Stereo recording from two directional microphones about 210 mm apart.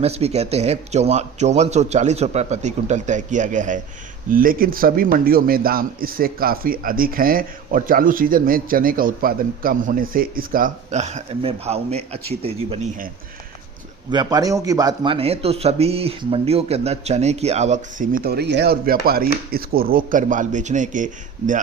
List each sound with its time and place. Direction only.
0.0 s a man's voice: 30° right (ahead or behind)
14.1 s a man's voice: 20° right (ahead or behind); by 21.6 s 35° right (ahead or behind)